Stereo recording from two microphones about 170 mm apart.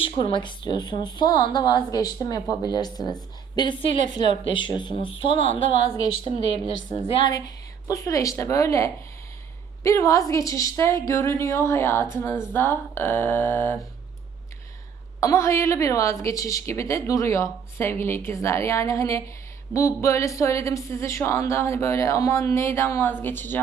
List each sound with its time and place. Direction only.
0.0 s a woman's voice: 30° left (ahead or behind)
7.1 s a woman's voice: 30° left (ahead or behind)
15.2 s a woman's voice: 20° left (ahead or behind)